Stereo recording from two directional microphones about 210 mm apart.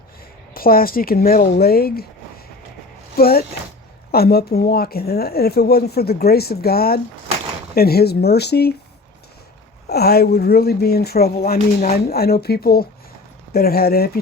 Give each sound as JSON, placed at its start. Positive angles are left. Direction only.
{"t": 0.5, "sound": "speech", "side_deg": 45}
{"t": 3.2, "sound": "speech", "side_deg": 45}
{"t": 9.9, "sound": "speech", "side_deg": 50}